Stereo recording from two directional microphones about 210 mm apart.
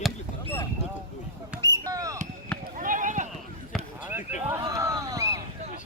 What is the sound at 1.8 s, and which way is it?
Basketball bounce, 15° right (ahead or behind).